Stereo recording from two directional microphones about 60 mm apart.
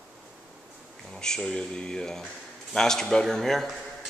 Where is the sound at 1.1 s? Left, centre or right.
Centre.